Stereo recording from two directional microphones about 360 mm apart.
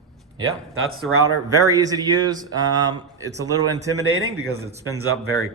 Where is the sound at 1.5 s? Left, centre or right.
Centre.